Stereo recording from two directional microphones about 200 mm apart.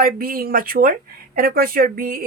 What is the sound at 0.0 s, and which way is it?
Speech, 45° right (ahead or behind).